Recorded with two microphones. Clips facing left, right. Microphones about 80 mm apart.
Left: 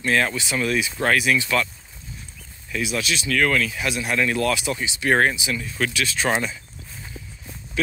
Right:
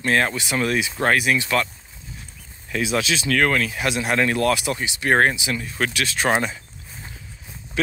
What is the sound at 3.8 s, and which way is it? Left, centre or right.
Speech, right.